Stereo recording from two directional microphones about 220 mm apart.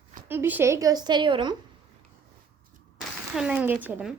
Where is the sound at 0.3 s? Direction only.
10° right (ahead or behind).